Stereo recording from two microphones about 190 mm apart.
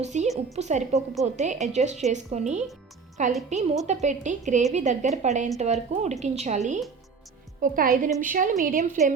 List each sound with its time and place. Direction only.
0.0 s a woman's voice: 35° right (ahead or behind)